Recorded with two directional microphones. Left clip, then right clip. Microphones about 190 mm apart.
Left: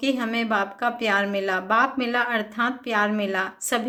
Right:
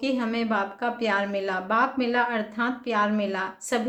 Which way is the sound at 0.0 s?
15° left (ahead or behind).